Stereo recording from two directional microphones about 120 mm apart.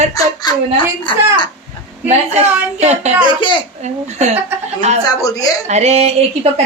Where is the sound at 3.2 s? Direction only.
40° left (ahead or behind).